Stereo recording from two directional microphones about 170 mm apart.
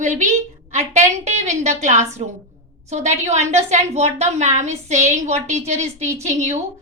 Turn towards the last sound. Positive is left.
turn(degrees=-40)  # may be behind; listen again after turning